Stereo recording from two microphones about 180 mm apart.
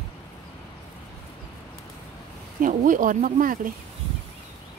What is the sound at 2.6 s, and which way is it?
Speech, 45° right (ahead or behind).